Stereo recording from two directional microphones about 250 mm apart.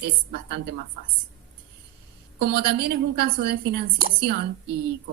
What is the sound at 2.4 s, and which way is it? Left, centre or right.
A woman's voice, right.